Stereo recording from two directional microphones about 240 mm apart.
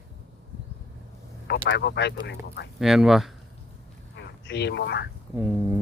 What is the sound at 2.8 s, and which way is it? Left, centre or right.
Speech, centre.